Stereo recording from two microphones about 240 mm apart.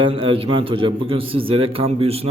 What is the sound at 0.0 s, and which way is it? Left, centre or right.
A man's voice, right.